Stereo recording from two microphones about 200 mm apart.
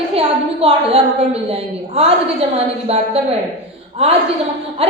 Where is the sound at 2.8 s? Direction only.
30° right (ahead or behind).